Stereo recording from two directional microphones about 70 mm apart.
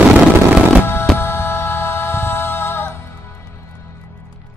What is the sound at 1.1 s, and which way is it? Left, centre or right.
Music, left.